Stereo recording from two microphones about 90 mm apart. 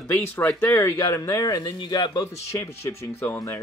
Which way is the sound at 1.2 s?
40° left (ahead or behind).